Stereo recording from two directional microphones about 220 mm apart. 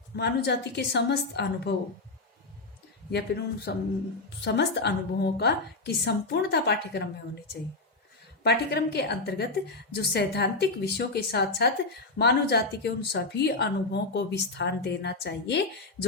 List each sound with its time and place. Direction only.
0.2 s a woman's voice: 50° left (ahead or behind)
3.1 s a woman's voice: 50° left (ahead or behind)
8.4 s a woman's voice: 50° left (ahead or behind)